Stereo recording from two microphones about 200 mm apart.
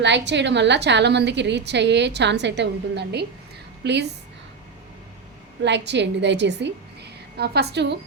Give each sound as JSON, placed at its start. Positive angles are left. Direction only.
{"t": 0.0, "sound": "a woman's voice", "side_deg": -60}
{"t": 5.6, "sound": "a woman's voice", "side_deg": -60}